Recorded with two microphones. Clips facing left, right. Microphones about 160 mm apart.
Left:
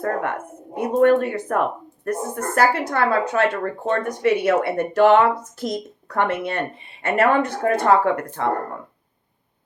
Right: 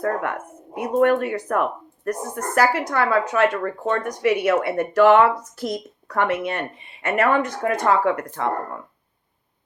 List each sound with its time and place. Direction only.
0.0 s a woman's voice: 30° left (ahead or behind)